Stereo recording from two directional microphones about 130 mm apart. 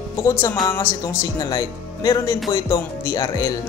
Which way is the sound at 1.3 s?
30° left (ahead or behind).